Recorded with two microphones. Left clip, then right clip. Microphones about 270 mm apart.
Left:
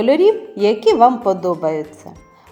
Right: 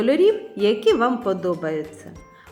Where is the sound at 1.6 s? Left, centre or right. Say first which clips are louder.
Left 6 dB; left.